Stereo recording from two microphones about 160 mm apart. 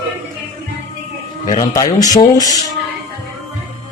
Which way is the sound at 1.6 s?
20° left (ahead or behind).